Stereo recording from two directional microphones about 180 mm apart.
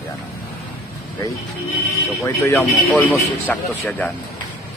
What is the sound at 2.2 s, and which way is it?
Speech, 15° left (ahead or behind).